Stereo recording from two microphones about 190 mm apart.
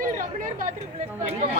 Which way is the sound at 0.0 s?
45° right (ahead or behind).